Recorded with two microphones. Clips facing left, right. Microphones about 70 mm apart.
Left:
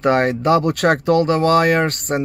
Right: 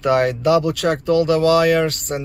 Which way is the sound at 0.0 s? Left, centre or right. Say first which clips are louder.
Even; left.